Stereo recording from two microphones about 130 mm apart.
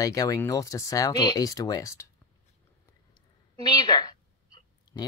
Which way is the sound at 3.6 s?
35° left (ahead or behind).